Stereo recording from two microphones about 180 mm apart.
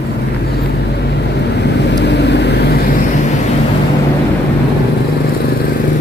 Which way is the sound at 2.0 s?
70° left (ahead or behind).